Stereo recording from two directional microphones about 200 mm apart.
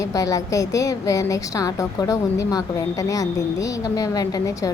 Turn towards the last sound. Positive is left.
turn(degrees=20)  # may be behind; listen again after turning